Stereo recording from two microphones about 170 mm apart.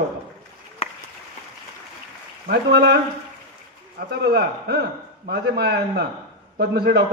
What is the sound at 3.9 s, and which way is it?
A man's voice, 70° right (ahead or behind).